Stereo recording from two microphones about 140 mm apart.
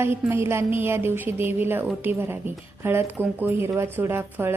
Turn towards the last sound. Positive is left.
turn(degrees=-15)  # may be behind; listen again after turning